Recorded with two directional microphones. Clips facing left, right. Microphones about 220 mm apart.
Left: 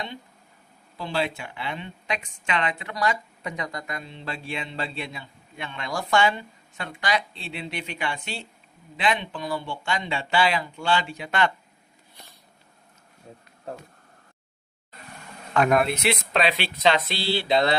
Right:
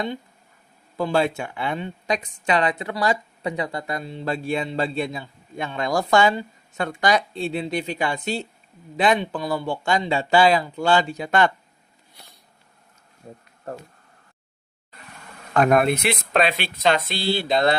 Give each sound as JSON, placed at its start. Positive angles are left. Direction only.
{"t": 0.9, "sound": "a woman's voice", "side_deg": -50}
{"t": 15.5, "sound": "speech", "side_deg": -45}